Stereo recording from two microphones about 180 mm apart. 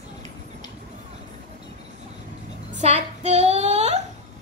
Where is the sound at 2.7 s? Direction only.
40° right (ahead or behind).